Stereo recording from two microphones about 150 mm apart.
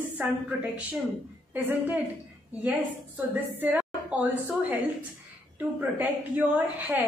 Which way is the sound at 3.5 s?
10° right (ahead or behind).